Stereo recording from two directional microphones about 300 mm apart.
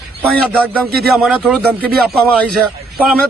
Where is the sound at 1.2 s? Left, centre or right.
Centre.